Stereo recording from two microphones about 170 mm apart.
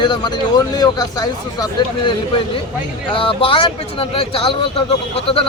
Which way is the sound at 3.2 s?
30° left (ahead or behind).